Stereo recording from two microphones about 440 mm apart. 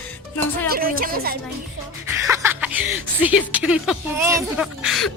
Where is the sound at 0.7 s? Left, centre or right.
Centre.